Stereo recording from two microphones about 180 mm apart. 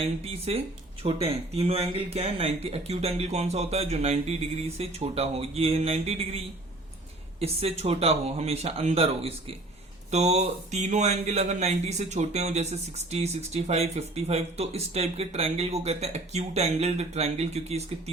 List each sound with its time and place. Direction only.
0.0 s speech: 35° right (ahead or behind)